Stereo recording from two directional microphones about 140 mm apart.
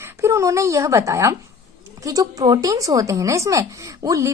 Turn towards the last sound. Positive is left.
turn(degrees=-25)  # may be behind; listen again after turning